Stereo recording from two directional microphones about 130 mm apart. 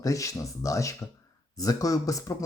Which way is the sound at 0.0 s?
25° left (ahead or behind).